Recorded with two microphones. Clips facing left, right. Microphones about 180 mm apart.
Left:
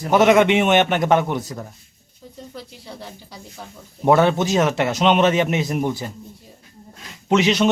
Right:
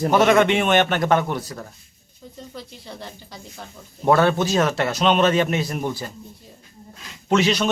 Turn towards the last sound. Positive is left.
turn(degrees=20)  # may be behind; listen again after turning